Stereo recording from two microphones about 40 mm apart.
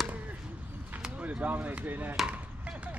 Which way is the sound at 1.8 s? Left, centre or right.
Right.